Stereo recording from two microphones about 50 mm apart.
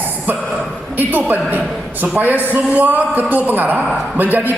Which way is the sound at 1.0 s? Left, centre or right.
Right.